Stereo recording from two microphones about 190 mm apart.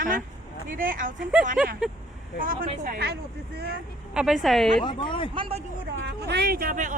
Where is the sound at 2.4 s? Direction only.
45° right (ahead or behind).